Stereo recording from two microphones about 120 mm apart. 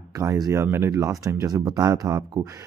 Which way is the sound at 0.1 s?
25° right (ahead or behind).